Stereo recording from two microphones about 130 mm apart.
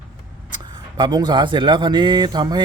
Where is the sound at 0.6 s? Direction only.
35° right (ahead or behind).